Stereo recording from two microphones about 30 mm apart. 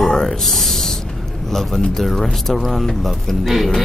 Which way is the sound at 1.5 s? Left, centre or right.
Centre.